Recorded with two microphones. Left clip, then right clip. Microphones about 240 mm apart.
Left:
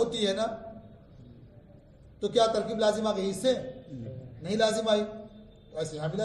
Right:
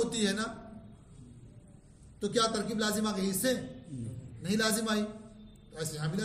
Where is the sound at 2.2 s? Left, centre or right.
Centre.